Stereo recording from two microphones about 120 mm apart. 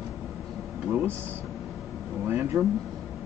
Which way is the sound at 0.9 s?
15° right (ahead or behind).